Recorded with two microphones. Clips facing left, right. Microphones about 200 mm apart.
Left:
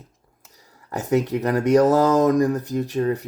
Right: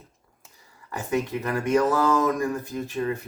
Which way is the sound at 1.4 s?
40° left (ahead or behind).